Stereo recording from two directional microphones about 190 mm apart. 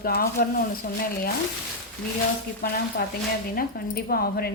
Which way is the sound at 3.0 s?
55° left (ahead or behind).